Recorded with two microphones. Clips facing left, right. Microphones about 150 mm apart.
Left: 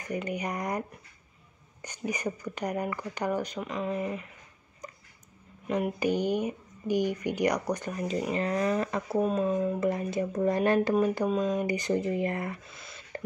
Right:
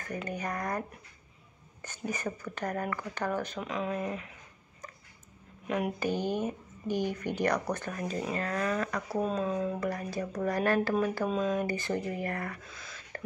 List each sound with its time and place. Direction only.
0.0 s speech: 15° left (ahead or behind)
3.6 s speech: centre (ahead or behind)
5.9 s speech: 15° left (ahead or behind)
9.2 s speech: 10° left (ahead or behind)
9.8 s speech: 20° left (ahead or behind)
11.2 s speech: 5° left (ahead or behind)
11.5 s speech: 15° left (ahead or behind)